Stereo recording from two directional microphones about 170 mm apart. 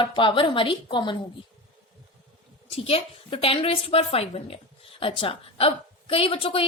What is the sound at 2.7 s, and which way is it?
A woman's voice, 35° left (ahead or behind).